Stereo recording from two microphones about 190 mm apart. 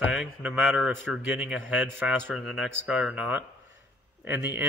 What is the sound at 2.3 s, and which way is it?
Speech, centre (ahead or behind).